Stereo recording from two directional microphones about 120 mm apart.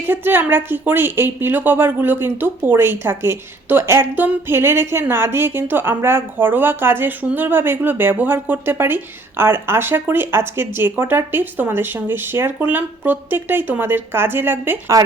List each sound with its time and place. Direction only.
0.1 s a woman's voice: 15° right (ahead or behind)